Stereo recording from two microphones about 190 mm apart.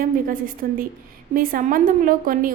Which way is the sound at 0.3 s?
50° right (ahead or behind).